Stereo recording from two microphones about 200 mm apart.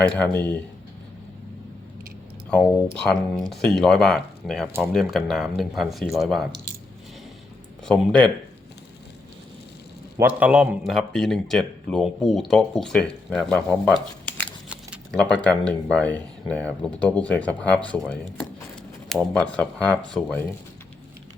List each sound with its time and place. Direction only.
3.0 s a man's voice: 5° left (ahead or behind)
7.9 s a man's voice: 5° left (ahead or behind)
10.2 s a man's voice: 10° right (ahead or behind)